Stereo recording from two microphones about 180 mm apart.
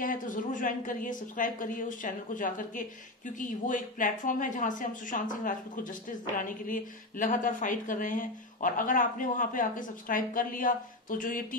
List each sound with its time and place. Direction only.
0.0 s speech: 50° left (ahead or behind)
6.7 s speech: 45° left (ahead or behind)